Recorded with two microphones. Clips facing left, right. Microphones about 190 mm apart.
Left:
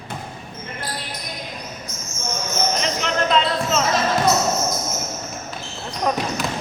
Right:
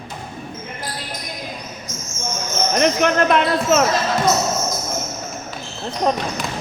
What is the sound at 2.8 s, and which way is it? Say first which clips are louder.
Speech: right 7 dB; 60° right (ahead or behind).